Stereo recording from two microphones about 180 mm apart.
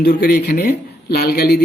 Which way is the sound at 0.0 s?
65° left (ahead or behind).